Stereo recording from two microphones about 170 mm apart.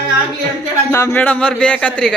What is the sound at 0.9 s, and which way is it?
Speech, 15° left (ahead or behind).